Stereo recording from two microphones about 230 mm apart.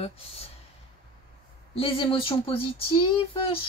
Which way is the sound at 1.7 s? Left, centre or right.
Left.